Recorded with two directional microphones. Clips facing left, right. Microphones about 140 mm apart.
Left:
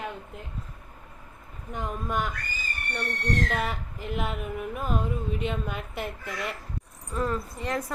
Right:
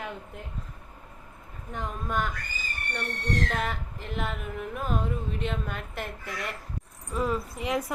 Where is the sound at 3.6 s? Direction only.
5° left (ahead or behind).